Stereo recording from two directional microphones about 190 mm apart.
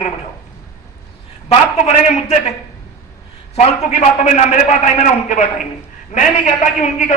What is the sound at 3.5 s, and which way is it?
A man's voice, 35° left (ahead or behind).